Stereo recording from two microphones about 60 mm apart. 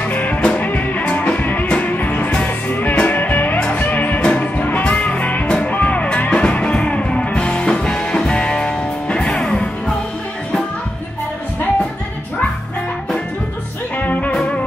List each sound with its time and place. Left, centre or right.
0.1 s music: left
13.9 s music: left